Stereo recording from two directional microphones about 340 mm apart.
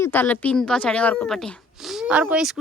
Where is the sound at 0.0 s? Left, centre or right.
Centre.